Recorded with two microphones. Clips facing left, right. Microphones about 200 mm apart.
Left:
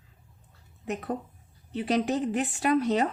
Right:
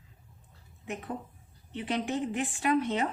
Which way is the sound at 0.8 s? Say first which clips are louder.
Left 5 dB; 40° left (ahead or behind).